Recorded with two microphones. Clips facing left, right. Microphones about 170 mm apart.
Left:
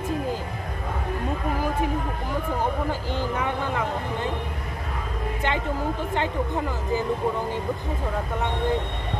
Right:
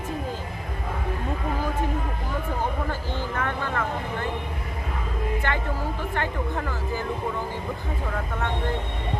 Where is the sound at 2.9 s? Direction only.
15° left (ahead or behind).